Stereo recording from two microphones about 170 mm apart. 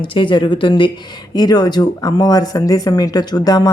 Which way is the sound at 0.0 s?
30° left (ahead or behind).